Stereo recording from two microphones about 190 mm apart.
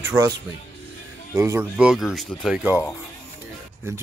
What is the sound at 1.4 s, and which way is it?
Speech, 15° right (ahead or behind).